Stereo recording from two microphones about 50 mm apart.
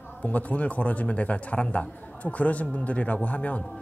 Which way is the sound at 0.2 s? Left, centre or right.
Left.